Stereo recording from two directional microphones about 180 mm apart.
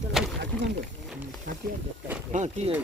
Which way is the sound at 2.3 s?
40° right (ahead or behind).